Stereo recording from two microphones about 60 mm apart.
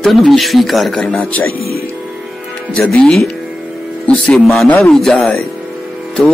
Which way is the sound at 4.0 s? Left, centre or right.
Left.